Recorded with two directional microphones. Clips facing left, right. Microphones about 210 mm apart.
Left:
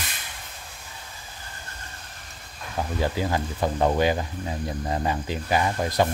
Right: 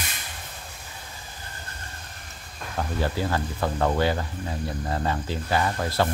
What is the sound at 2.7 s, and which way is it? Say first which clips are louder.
Speech: left 1 dB; 15° left (ahead or behind).